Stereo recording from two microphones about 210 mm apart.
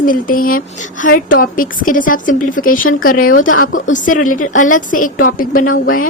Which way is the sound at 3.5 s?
70° left (ahead or behind).